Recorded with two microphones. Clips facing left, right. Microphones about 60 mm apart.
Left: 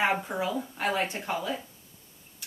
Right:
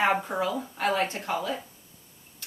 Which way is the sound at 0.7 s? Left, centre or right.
Centre.